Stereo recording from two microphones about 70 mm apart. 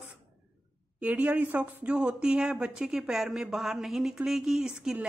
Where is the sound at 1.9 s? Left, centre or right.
Centre.